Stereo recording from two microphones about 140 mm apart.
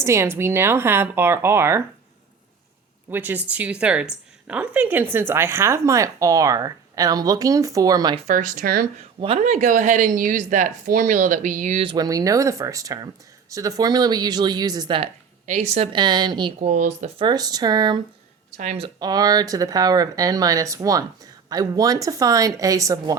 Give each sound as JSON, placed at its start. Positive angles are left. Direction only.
{"t": 0.0, "sound": "speech", "side_deg": -20}
{"t": 3.1, "sound": "a woman's voice", "side_deg": -15}
{"t": 8.3, "sound": "speech", "side_deg": -70}
{"t": 9.4, "sound": "a woman's voice", "side_deg": -65}
{"t": 11.8, "sound": "a woman's voice", "side_deg": -35}
{"t": 12.0, "sound": "a woman's voice", "side_deg": -25}
{"t": 15.4, "sound": "a woman's voice", "side_deg": -50}
{"t": 15.9, "sound": "a woman's voice", "side_deg": -30}
{"t": 16.6, "sound": "a woman's voice", "side_deg": -60}
{"t": 17.2, "sound": "a woman's voice", "side_deg": -30}
{"t": 18.5, "sound": "a woman's voice", "side_deg": -50}
{"t": 18.9, "sound": "a woman's voice", "side_deg": -30}